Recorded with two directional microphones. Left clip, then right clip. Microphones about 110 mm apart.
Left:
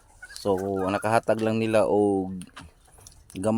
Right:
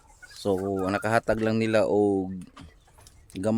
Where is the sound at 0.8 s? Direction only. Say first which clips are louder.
Left 2 dB; 25° right (ahead or behind).